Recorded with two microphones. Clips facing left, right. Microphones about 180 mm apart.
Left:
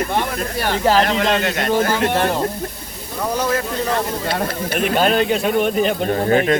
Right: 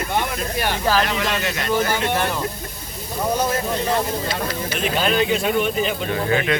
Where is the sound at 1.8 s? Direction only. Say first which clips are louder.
Left 4 dB; 40° left (ahead or behind).